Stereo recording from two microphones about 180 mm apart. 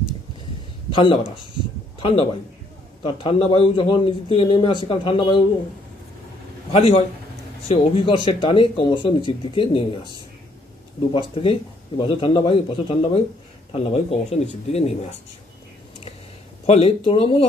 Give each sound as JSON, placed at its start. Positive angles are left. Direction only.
{"t": 0.9, "sound": "a man's voice", "side_deg": 25}
{"t": 1.5, "sound": "a sound", "side_deg": 25}
{"t": 3.0, "sound": "a man's voice", "side_deg": 30}
{"t": 6.7, "sound": "a man's voice", "side_deg": 35}
{"t": 11.1, "sound": "a man's voice", "side_deg": 30}
{"t": 16.6, "sound": "speech", "side_deg": 35}